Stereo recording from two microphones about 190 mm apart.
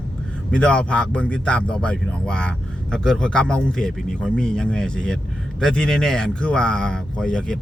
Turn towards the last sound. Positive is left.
turn(degrees=5)  # may be behind; listen again after turning